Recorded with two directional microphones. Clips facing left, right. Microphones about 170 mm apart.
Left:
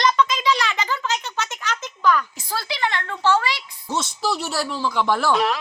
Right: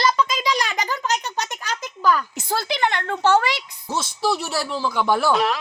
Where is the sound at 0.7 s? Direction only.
40° right (ahead or behind).